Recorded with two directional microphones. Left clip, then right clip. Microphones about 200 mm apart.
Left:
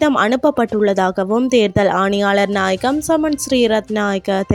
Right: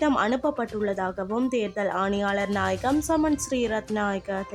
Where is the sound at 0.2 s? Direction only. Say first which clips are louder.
Left 10 dB; 35° left (ahead or behind).